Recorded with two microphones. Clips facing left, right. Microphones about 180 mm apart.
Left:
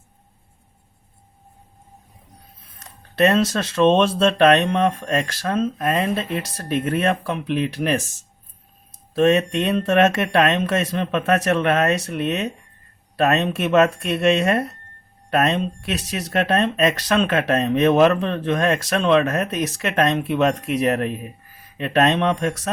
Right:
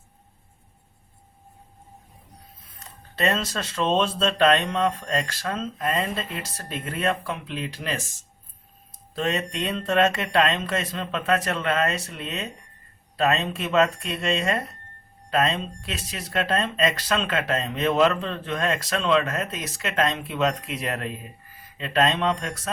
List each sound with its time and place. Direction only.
3.2 s speech: 70° left (ahead or behind)
5.5 s speech: 50° left (ahead or behind); by 8.0 s 65° left (ahead or behind)
9.1 s speech: 65° left (ahead or behind)
18.9 s speech: 50° left (ahead or behind); by 20.5 s 65° left (ahead or behind)
20.8 s speech: 50° left (ahead or behind)
21.8 s speech: 65° left (ahead or behind)